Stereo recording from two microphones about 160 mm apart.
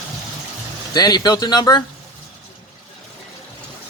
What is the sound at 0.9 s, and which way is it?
Speech, 25° left (ahead or behind).